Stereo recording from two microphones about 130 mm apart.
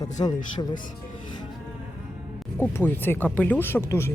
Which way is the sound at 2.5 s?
15° left (ahead or behind).